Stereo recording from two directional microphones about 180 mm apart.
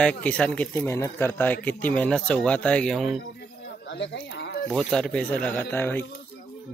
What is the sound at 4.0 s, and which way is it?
Speech, 75° left (ahead or behind).